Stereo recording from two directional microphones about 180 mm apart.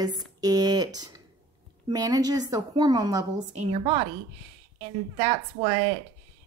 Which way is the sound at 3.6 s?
30° right (ahead or behind).